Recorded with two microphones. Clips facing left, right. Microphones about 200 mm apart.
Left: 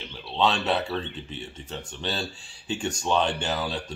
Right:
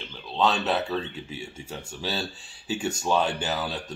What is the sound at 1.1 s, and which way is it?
Speech, 10° right (ahead or behind).